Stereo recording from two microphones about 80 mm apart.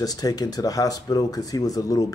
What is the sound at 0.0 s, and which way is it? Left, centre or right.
Speech, left.